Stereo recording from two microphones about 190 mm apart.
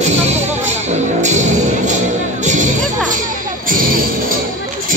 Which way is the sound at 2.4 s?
40° right (ahead or behind).